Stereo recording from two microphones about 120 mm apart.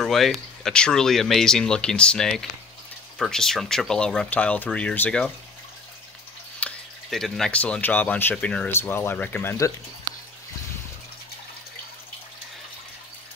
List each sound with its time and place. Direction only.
0.0 s speech: centre (ahead or behind)
6.6 s speech: centre (ahead or behind); by 9.7 s 20° left (ahead or behind)